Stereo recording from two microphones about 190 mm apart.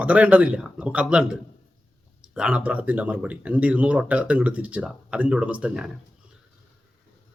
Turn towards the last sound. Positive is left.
turn(degrees=-5)  # may be behind; listen again after turning